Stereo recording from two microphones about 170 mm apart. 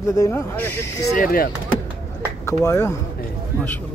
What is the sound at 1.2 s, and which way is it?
Speech, 60° left (ahead or behind).